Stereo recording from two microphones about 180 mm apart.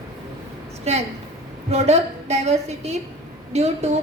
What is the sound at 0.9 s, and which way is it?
A woman's voice, 35° right (ahead or behind).